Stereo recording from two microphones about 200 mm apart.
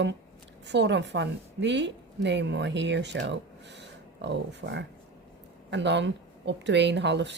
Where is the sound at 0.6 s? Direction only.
60° right (ahead or behind).